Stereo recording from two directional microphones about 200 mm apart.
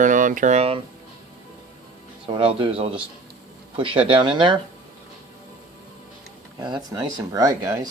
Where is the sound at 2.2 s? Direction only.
25° right (ahead or behind).